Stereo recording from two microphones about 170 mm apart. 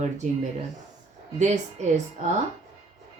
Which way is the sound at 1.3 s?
45° right (ahead or behind).